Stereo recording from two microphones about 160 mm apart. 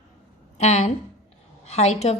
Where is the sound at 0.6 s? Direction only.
45° left (ahead or behind).